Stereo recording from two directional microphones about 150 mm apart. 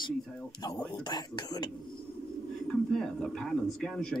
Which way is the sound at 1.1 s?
30° left (ahead or behind).